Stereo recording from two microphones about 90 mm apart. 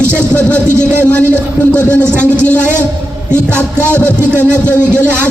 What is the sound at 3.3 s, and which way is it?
Speech, 25° right (ahead or behind).